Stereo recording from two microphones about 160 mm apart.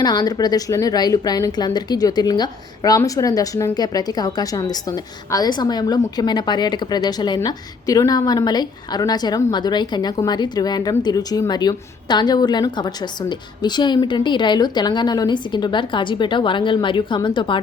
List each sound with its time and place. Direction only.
0.0 s a woman's voice: 25° left (ahead or behind)